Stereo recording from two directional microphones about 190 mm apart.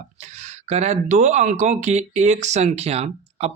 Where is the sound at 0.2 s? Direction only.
35° right (ahead or behind).